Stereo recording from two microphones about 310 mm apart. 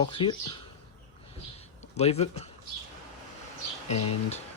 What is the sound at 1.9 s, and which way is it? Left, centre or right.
Speech, left.